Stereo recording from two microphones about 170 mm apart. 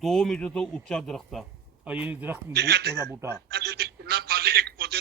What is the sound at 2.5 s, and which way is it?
Speech, 75° right (ahead or behind).